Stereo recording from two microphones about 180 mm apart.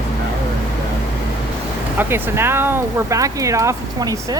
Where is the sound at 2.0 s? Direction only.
10° right (ahead or behind).